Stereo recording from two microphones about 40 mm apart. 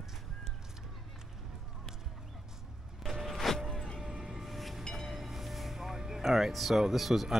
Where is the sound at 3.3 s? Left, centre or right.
Centre.